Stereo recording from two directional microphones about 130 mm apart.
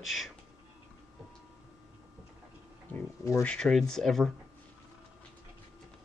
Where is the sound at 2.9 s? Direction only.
15° left (ahead or behind).